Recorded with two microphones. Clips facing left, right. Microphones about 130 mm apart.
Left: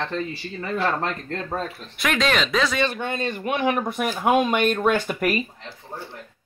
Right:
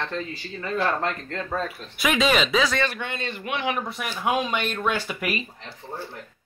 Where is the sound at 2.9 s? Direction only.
40° left (ahead or behind).